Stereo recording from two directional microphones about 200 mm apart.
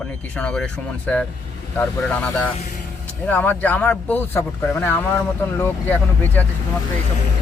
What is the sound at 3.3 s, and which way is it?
A man's voice, 10° left (ahead or behind).